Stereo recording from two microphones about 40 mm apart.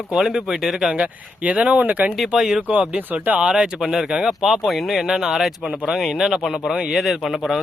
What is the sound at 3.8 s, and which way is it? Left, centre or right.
Speech, centre.